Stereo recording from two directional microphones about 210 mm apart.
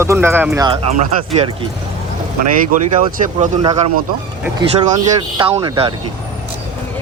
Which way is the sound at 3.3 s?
25° right (ahead or behind).